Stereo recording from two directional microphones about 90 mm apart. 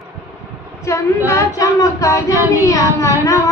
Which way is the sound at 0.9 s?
35° left (ahead or behind).